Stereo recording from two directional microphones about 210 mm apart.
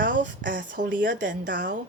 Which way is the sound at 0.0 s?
40° right (ahead or behind).